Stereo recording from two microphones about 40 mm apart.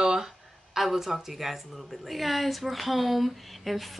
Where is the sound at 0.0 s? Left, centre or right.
Centre.